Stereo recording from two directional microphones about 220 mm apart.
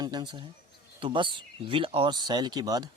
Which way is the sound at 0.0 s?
20° right (ahead or behind).